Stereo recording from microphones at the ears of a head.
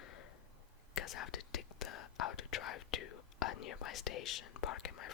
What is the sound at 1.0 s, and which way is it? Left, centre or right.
Whispering, left.